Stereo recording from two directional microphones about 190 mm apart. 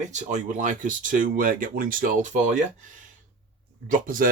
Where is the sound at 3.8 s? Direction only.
45° right (ahead or behind).